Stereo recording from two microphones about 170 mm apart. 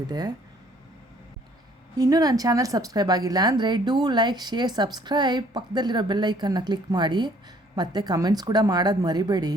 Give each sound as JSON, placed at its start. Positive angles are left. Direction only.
{"t": 0.1, "sound": "a woman's voice", "side_deg": -25}
{"t": 2.0, "sound": "a woman's voice", "side_deg": -20}